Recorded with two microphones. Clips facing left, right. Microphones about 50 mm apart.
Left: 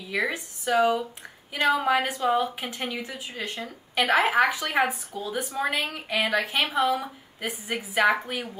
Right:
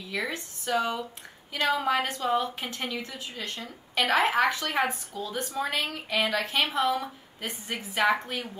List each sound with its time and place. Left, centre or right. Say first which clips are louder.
0.1 s a woman's voice: left 5 dB; centre
2.8 s a woman's voice: left 2 dB; centre